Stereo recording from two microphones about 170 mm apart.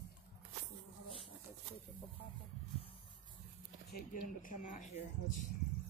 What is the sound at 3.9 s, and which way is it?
Speech, 55° left (ahead or behind).